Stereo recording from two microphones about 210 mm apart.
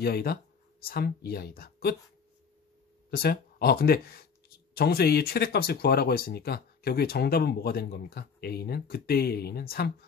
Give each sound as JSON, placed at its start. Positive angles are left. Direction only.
{"t": 0.0, "sound": "speech", "side_deg": 50}
{"t": 3.1, "sound": "speech", "side_deg": 45}